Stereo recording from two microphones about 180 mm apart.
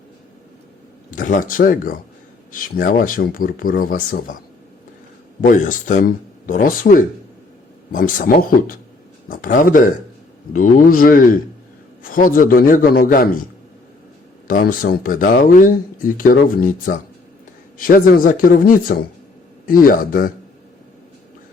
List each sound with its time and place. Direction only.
1.1 s speech: 45° left (ahead or behind)
5.4 s speech: 45° left (ahead or behind)
14.4 s speech: 50° left (ahead or behind)